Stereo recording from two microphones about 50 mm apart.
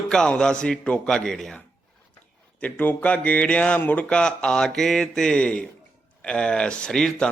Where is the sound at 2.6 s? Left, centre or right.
Left.